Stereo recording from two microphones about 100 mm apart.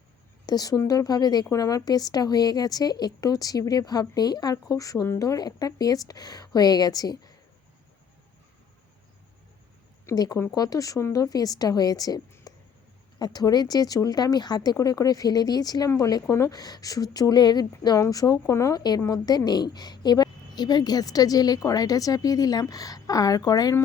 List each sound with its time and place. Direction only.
0.4 s a woman's voice: 40° left (ahead or behind)
10.1 s speech: 25° left (ahead or behind)
10.5 s a woman's voice: 35° left (ahead or behind)
12.5 s a sound: 40° left (ahead or behind)
13.1 s a woman's voice: 40° left (ahead or behind)